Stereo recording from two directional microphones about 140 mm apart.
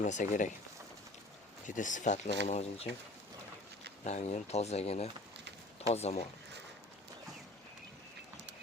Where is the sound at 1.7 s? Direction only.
65° left (ahead or behind).